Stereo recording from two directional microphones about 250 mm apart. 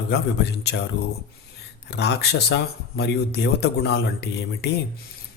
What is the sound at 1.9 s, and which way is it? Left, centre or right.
Speech, left.